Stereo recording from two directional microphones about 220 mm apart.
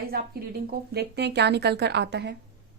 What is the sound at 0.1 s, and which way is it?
A woman's voice, 45° right (ahead or behind).